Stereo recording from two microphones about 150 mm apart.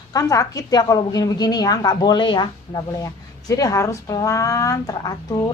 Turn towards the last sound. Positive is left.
turn(degrees=25)  # may be behind; listen again after turning